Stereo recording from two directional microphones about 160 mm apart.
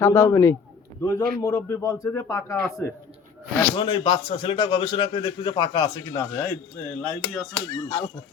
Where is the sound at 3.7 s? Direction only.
30° left (ahead or behind).